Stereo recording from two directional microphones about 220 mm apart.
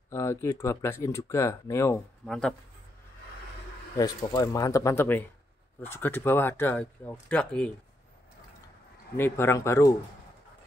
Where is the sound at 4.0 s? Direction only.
15° left (ahead or behind).